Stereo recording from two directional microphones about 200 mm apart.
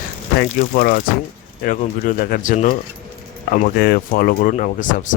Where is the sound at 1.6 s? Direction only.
45° left (ahead or behind).